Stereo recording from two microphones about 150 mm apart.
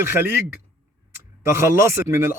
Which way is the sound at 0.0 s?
15° right (ahead or behind).